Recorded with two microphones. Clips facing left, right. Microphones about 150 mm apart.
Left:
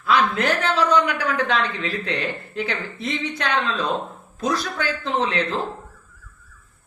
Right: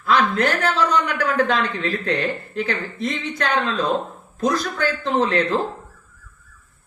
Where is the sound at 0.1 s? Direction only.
40° right (ahead or behind).